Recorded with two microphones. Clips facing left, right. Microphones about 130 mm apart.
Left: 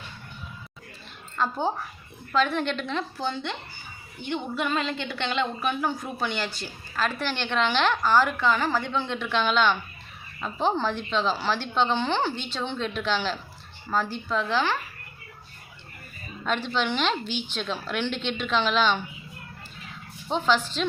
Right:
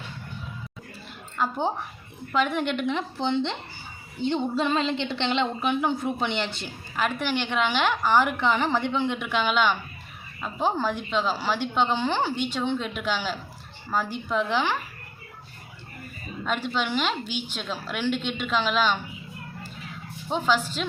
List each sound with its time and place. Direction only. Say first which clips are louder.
1.4 s a woman's voice: even; 15° right (ahead or behind)
16.5 s a woman's voice: left 1 dB; 5° right (ahead or behind)
20.2 s a woman's voice: even; 5° right (ahead or behind)